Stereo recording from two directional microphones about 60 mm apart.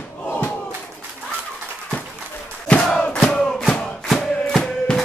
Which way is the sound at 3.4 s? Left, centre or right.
Centre.